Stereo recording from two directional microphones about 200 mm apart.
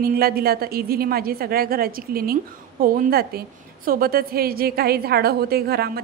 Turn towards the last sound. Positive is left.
turn(degrees=-50)  # may be behind; listen again after turning